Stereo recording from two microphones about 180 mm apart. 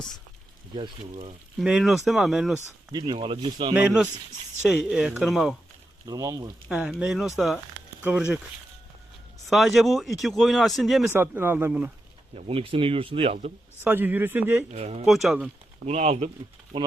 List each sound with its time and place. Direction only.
0.8 s speech: 30° right (ahead or behind)
1.5 s speech: centre (ahead or behind)
2.9 s speech: 25° right (ahead or behind)
3.8 s speech: 10° right (ahead or behind)
6.1 s speech: 20° right (ahead or behind)
6.7 s speech: 5° right (ahead or behind)
9.5 s speech: centre (ahead or behind)
11.1 s speech: 10° right (ahead or behind)
12.3 s speech: 30° right (ahead or behind)
13.8 s speech: 10° right (ahead or behind)
14.7 s speech: 40° right (ahead or behind)
15.0 s speech: centre (ahead or behind)
15.9 s speech: 40° right (ahead or behind)
16.7 s speech: 25° right (ahead or behind)